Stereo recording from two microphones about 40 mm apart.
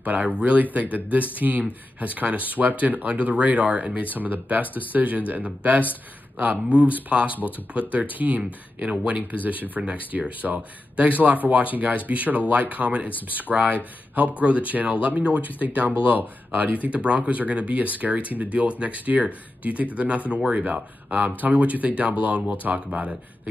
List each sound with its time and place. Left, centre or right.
0.0 s speech: right
4.1 s speech: right
6.7 s speech: right